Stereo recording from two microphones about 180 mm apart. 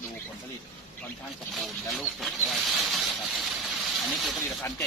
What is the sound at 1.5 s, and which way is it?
Speech, centre (ahead or behind).